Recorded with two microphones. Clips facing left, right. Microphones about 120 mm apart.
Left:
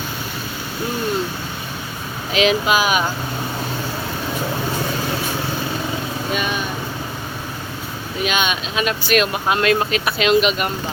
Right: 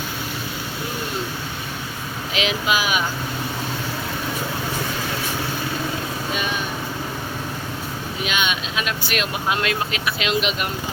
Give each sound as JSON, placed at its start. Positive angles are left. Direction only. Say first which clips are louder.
{"t": 2.3, "sound": "speech", "louder": "left 6 dB", "side_deg": 40}
{"t": 8.3, "sound": "speech", "louder": "left 2 dB", "side_deg": 35}
{"t": 9.0, "sound": "speech", "louder": "left 7 dB", "side_deg": 50}